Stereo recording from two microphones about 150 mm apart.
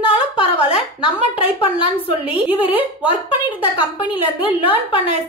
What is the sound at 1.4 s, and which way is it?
Speech, 40° left (ahead or behind).